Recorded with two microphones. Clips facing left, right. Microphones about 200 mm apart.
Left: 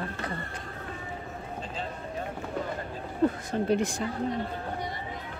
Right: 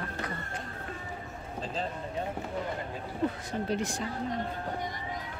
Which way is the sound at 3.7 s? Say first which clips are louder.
Left 6 dB; 55° left (ahead or behind).